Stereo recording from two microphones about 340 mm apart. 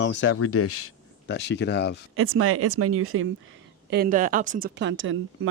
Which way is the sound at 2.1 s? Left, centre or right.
Right.